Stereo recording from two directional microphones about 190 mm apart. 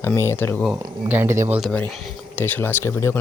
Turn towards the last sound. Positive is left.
turn(degrees=15)  # may be behind; listen again after turning